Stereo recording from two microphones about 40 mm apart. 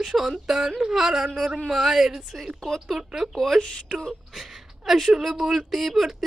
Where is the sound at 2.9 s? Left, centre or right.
Centre.